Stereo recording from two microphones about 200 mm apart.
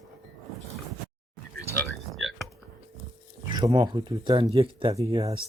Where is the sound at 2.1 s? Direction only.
Centre (ahead or behind).